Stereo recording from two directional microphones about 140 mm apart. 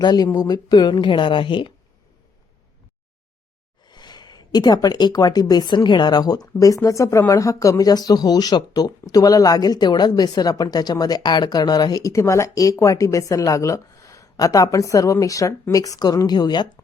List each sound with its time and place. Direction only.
0.0 s a woman's voice: 30° left (ahead or behind)
3.8 s speech: 30° left (ahead or behind)